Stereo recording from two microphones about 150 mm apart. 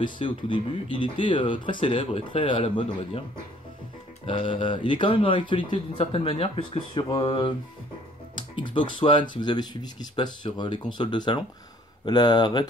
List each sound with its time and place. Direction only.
0.0 s speech: 35° left (ahead or behind)
4.3 s speech: 35° left (ahead or behind)
8.5 s speech: 35° left (ahead or behind)